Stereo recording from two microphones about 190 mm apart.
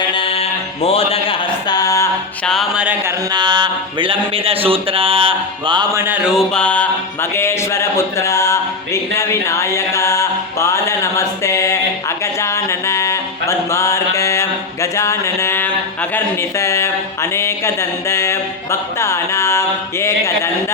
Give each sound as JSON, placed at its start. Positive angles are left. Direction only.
{"t": 0.0, "sound": "sheep", "side_deg": 25}
{"t": 2.4, "sound": "music", "side_deg": 0}
{"t": 3.3, "sound": "a sound", "side_deg": -20}
{"t": 16.1, "sound": "mantra", "side_deg": 15}